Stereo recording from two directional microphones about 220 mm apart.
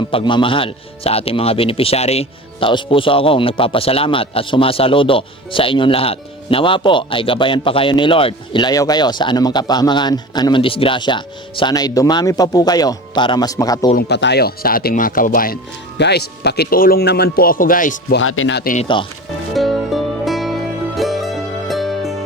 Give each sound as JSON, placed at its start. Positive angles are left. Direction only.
{"t": 0.1, "sound": "speech", "side_deg": 25}
{"t": 13.9, "sound": "speech", "side_deg": 50}
{"t": 18.2, "sound": "speech", "side_deg": 65}
{"t": 18.6, "sound": "speech", "side_deg": 35}
{"t": 19.5, "sound": "music", "side_deg": 0}